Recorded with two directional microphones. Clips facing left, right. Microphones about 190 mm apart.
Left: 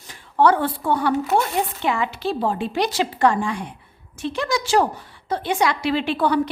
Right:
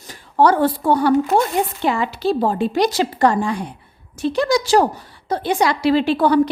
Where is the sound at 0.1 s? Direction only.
40° right (ahead or behind).